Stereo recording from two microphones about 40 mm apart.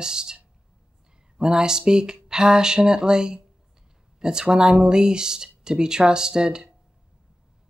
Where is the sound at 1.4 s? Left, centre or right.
Centre.